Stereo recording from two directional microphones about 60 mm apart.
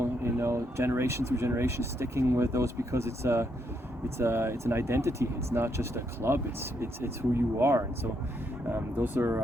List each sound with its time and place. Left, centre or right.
0.0 s speech: right
8.7 s speech: right